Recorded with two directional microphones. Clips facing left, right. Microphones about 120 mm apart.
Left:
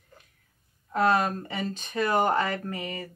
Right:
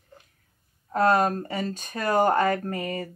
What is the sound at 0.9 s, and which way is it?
Speech, 45° right (ahead or behind).